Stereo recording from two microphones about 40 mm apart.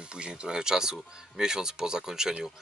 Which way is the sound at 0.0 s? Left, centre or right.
Right.